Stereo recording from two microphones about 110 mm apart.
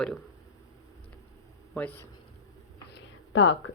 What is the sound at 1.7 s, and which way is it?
Speech, 15° left (ahead or behind).